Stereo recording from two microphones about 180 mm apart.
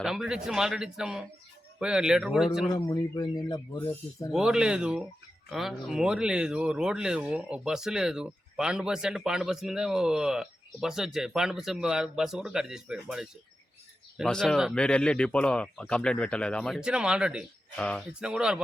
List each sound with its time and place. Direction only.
0.0 s speech: 5° right (ahead or behind)
2.7 s speech: 20° left (ahead or behind)
4.3 s speech: 5° right (ahead or behind)
17.7 s speech: 5° left (ahead or behind)
18.2 s speech: 5° right (ahead or behind)